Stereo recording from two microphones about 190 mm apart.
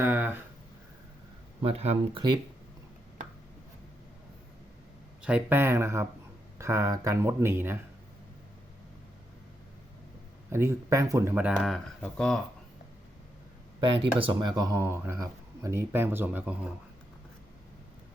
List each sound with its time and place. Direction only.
0.0 s a sound: 10° right (ahead or behind)
1.6 s speech: 35° right (ahead or behind)
5.2 s speech: 10° right (ahead or behind)
10.5 s speech: 15° right (ahead or behind); by 12.4 s 5° left (ahead or behind)
13.8 s speech: 25° right (ahead or behind); by 16.7 s 5° right (ahead or behind)